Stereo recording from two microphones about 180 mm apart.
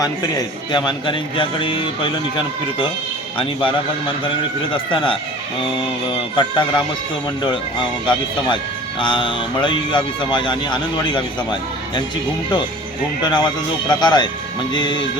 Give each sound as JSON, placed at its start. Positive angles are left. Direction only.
{"t": 0.0, "sound": "speech", "side_deg": 20}
{"t": 3.3, "sound": "speech", "side_deg": 30}
{"t": 4.9, "sound": "speech", "side_deg": 25}
{"t": 6.3, "sound": "speech", "side_deg": 25}
{"t": 13.2, "sound": "speech", "side_deg": 25}